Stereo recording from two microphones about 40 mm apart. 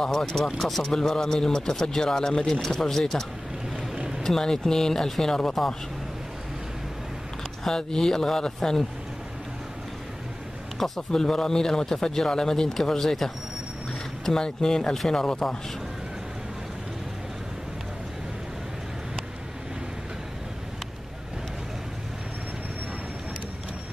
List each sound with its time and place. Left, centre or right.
0.0 s speech: centre
0.6 s speech: centre
0.8 s speech: centre
3.9 s vehicle: centre
4.2 s speech: centre
7.6 s speech: centre
11.0 s speech: centre